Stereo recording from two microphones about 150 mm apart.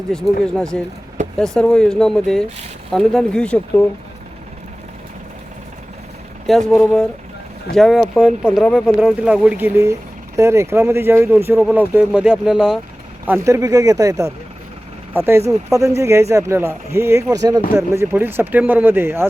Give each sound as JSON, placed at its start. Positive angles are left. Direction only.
{"t": 0.1, "sound": "speech", "side_deg": 5}
{"t": 6.7, "sound": "speech", "side_deg": 0}
{"t": 13.5, "sound": "speech", "side_deg": -25}
{"t": 15.3, "sound": "speech", "side_deg": -20}